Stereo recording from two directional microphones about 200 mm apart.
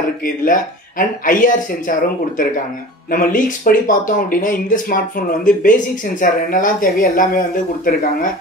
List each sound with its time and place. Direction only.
0.2 s speech: 45° left (ahead or behind)